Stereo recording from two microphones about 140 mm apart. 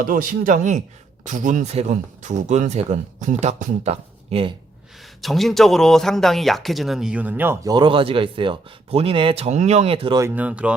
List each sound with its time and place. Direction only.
0.0 s speech: 85° right; by 4.5 s 45° right (ahead or behind)
5.2 s speech: centre (ahead or behind); by 7.7 s 15° right (ahead or behind)
7.7 s a man's voice: 35° right (ahead or behind)
10.3 s speech: 10° right (ahead or behind)